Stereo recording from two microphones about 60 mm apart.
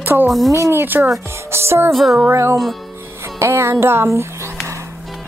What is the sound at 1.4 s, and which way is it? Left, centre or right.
Music, right.